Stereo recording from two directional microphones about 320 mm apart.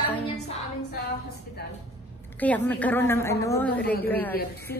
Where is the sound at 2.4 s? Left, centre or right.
Centre.